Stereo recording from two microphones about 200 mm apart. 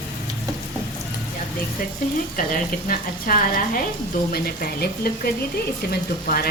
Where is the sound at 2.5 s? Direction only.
45° left (ahead or behind).